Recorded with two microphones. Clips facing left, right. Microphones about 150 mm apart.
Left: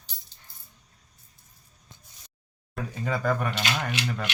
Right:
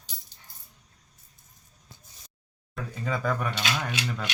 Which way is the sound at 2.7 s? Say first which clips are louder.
Left 1 dB; 5° left (ahead or behind).